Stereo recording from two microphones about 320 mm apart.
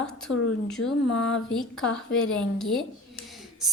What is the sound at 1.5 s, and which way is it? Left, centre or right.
A woman's voice, centre.